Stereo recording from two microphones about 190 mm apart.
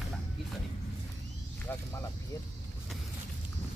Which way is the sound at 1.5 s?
10° left (ahead or behind).